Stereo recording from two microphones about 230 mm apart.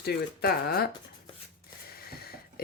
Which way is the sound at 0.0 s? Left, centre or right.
Left.